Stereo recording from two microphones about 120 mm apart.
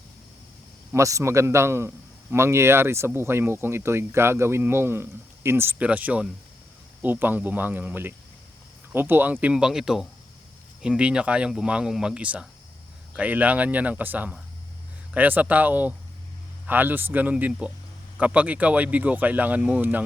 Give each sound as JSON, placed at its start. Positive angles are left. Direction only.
{"t": 0.9, "sound": "speech", "side_deg": -25}